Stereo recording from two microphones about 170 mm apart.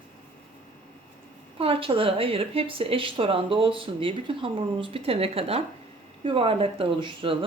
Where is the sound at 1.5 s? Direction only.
35° right (ahead or behind).